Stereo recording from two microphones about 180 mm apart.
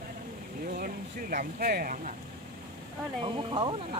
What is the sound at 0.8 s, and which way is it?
Speech, 55° right (ahead or behind).